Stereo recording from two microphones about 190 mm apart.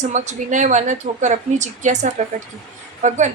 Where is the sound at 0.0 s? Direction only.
40° right (ahead or behind).